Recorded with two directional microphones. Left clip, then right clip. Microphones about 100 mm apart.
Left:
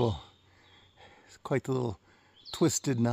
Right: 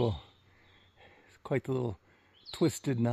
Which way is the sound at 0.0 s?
30° left (ahead or behind).